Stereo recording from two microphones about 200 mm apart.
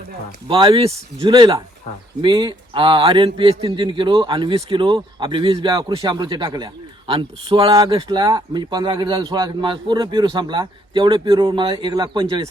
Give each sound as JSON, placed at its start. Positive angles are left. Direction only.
{"t": 0.4, "sound": "a man's voice", "side_deg": -25}